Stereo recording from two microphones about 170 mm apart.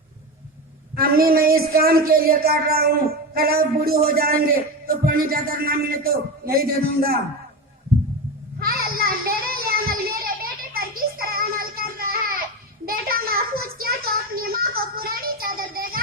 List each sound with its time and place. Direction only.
0.9 s speech: 60° right (ahead or behind)
8.5 s child singing: 60° right (ahead or behind)
12.8 s a sound: 60° right (ahead or behind)